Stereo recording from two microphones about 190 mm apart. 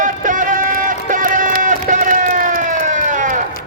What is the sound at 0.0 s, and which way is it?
Run, 45° right (ahead or behind).